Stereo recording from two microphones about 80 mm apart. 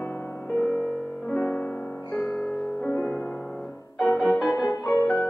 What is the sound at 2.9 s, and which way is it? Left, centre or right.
Music, left.